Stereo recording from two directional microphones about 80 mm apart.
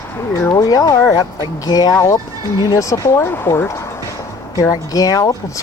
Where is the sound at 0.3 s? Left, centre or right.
Left.